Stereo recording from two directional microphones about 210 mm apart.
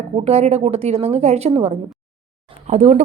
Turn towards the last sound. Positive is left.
turn(degrees=-35)  # may be behind; listen again after turning